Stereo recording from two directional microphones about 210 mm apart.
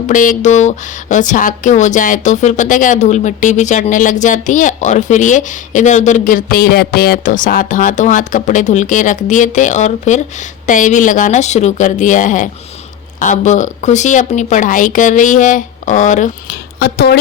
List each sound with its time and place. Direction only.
0.1 s a woman's voice: 40° left (ahead or behind)
16.5 s speech: 50° left (ahead or behind)